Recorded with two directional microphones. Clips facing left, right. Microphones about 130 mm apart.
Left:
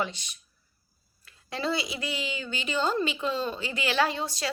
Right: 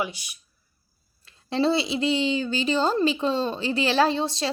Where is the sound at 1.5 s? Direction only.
30° right (ahead or behind).